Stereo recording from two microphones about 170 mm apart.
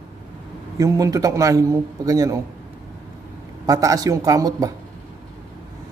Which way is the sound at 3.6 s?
20° right (ahead or behind).